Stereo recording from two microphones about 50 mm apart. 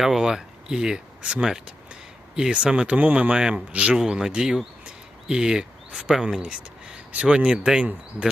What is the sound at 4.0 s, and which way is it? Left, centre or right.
Speech, centre.